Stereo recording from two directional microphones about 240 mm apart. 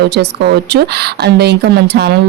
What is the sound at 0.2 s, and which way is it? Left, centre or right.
A woman's voice, right.